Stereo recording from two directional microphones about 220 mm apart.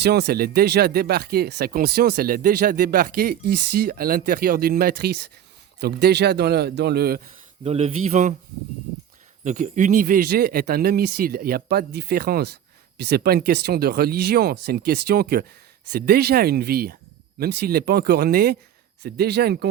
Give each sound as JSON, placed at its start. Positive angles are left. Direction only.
{"t": 0.0, "sound": "speech", "side_deg": -50}
{"t": 7.6, "sound": "a man's voice", "side_deg": -30}
{"t": 9.4, "sound": "speech", "side_deg": -35}